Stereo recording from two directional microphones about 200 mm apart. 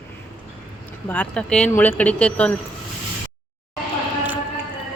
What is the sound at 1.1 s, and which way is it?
Speech, 5° left (ahead or behind).